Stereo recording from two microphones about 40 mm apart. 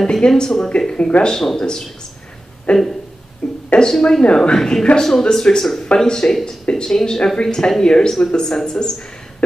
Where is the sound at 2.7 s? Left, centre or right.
Left.